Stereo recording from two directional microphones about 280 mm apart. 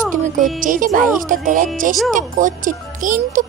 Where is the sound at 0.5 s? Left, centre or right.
Right.